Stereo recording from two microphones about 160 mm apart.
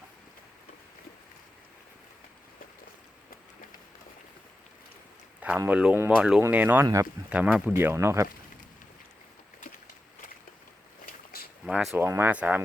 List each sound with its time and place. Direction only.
5.4 s speech: 10° right (ahead or behind)
7.3 s speech: 5° right (ahead or behind)
11.0 s a sound: 65° left (ahead or behind)
11.6 s speech: 5° right (ahead or behind)
11.9 s speech: 15° right (ahead or behind)